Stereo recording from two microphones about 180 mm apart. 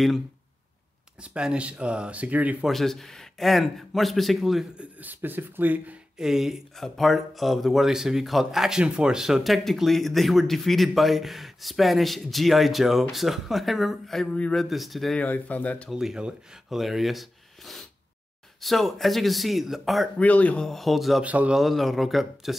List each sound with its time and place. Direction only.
1.2 s speech: 5° right (ahead or behind)
15.9 s speech: centre (ahead or behind)